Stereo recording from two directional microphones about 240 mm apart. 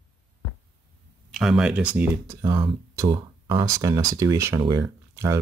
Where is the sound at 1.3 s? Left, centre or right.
Centre.